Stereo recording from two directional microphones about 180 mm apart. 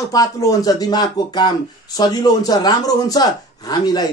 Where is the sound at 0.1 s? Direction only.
20° left (ahead or behind).